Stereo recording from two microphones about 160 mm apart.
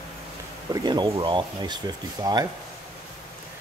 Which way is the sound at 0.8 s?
25° right (ahead or behind).